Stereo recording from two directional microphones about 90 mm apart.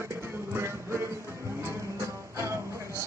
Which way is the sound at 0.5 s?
30° right (ahead or behind).